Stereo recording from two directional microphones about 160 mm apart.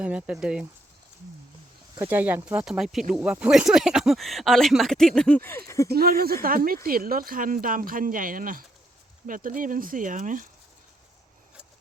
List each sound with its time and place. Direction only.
0.0 s speech: 10° right (ahead or behind)
2.0 s speech: 10° right (ahead or behind); by 5.9 s 20° left (ahead or behind)
5.9 s speech: 70° right (ahead or behind)